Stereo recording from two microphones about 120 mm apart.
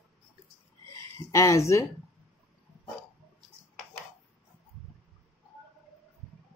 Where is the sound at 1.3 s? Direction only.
25° left (ahead or behind).